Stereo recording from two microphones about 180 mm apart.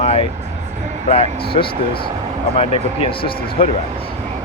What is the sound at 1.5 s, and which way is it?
Speech, 30° left (ahead or behind).